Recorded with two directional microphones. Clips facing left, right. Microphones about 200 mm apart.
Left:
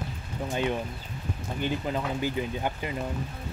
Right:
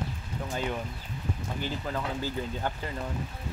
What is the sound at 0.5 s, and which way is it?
Speech, 20° left (ahead or behind).